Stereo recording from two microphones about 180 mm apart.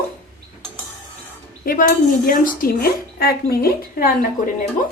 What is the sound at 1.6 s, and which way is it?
A woman's voice, 50° left (ahead or behind).